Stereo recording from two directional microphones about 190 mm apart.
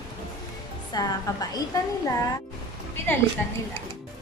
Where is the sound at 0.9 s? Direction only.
20° left (ahead or behind).